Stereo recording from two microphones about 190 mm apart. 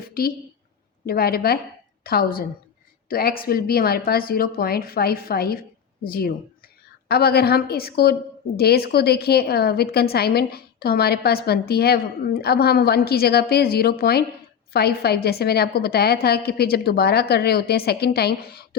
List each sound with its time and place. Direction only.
0.1 s a woman's voice: 50° left (ahead or behind)